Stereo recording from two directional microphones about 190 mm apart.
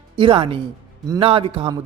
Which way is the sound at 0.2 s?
25° right (ahead or behind).